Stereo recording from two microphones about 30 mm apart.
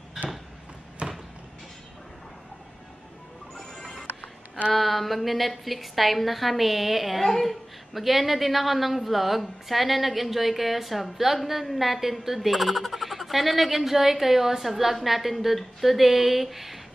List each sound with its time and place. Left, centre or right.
1.0 s a sound: right
3.5 s music: centre
4.7 s a woman's voice: centre
7.2 s a woman's voice: centre
7.9 s a woman's voice: centre